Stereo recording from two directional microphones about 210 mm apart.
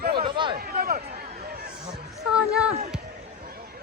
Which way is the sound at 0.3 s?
20° right (ahead or behind).